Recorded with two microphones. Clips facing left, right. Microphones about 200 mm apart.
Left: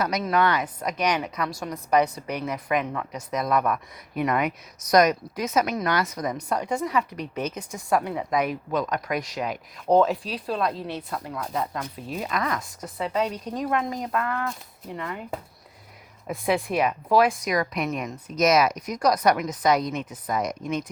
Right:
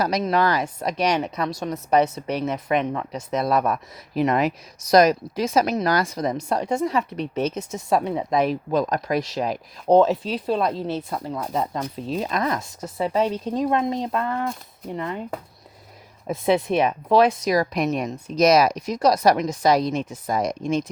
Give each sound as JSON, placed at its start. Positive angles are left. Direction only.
{"t": 0.0, "sound": "speech", "side_deg": -30}
{"t": 16.2, "sound": "speech", "side_deg": -25}